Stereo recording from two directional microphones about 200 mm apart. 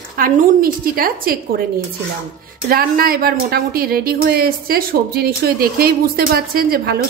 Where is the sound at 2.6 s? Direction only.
45° right (ahead or behind).